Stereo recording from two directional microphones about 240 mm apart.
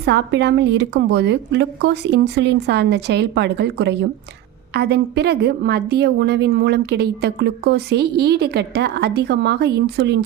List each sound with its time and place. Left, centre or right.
0.0 s a woman's voice: right